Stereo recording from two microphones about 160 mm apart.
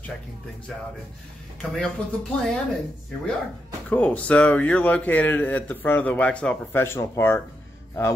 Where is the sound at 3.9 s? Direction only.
10° left (ahead or behind).